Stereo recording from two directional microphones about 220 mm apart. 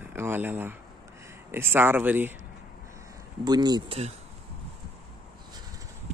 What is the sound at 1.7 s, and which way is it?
Speech, 10° right (ahead or behind).